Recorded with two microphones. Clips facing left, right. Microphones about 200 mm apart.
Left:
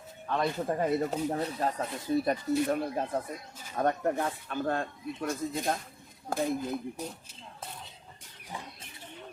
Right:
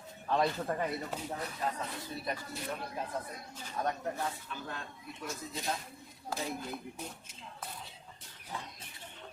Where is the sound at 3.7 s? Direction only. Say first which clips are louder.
Left 7 dB; 55° left (ahead or behind).